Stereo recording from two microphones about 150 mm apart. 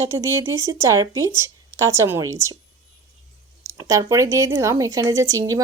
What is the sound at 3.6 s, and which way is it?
Speech, 20° right (ahead or behind).